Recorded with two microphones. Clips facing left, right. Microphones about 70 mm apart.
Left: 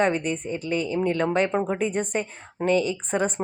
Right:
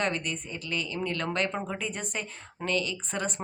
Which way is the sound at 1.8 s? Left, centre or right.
Left.